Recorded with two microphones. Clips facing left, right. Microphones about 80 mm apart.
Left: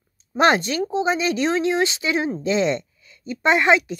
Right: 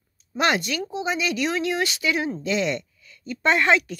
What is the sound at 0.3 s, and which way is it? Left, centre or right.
Speech, left.